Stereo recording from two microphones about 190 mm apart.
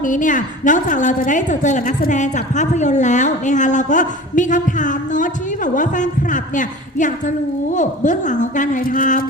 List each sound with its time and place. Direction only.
0.0 s a woman's voice: 45° left (ahead or behind)